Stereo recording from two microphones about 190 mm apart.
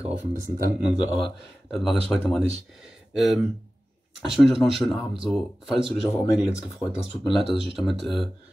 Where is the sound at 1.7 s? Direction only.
Centre (ahead or behind).